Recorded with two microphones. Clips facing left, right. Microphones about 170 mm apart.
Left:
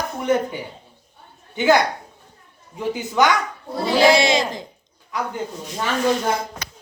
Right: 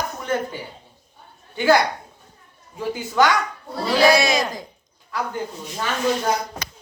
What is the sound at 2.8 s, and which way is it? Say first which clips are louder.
Speech: even; 20° left (ahead or behind).